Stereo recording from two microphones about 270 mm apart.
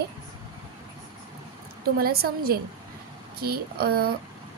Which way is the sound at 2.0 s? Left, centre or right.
Right.